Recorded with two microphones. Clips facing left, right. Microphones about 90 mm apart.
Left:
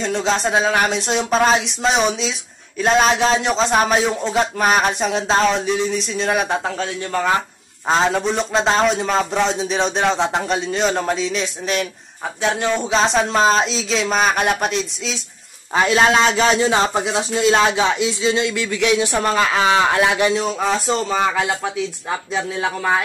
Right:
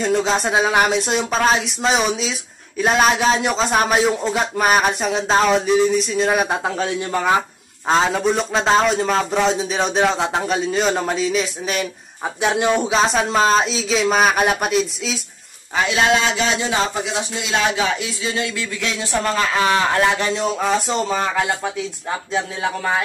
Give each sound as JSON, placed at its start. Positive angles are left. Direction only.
{"t": 0.0, "sound": "a man's voice", "side_deg": -5}
{"t": 12.4, "sound": "speech", "side_deg": -15}
{"t": 12.9, "sound": "a man's voice", "side_deg": -5}
{"t": 15.7, "sound": "a man's voice", "side_deg": 35}
{"t": 17.6, "sound": "speech", "side_deg": 25}